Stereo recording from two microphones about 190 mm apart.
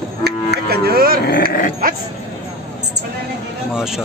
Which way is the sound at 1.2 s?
55° left (ahead or behind).